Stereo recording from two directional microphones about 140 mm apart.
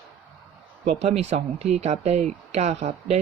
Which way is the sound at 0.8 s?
50° right (ahead or behind).